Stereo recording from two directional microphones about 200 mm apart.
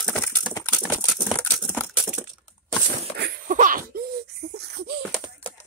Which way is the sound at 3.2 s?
45° right (ahead or behind).